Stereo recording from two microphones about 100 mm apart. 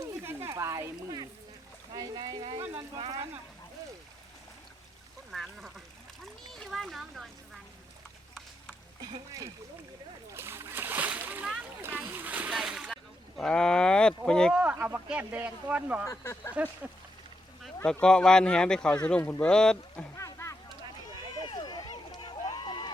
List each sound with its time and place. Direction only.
0.3 s speech: 30° right (ahead or behind); by 2.5 s 45° right (ahead or behind)
2.6 s speech: 30° right (ahead or behind)
5.3 s a child's voice: centre (ahead or behind)
10.3 s splash: 25° right (ahead or behind)
12.5 s slosh: 5° right (ahead or behind)
13.3 s speech: 10° left (ahead or behind)
14.5 s speech: 15° right (ahead or behind)
16.0 s speech: 30° left (ahead or behind)
18.0 s speech: 10° left (ahead or behind)
20.1 s a sound: 30° left (ahead or behind)
21.4 s run: 50° left (ahead or behind)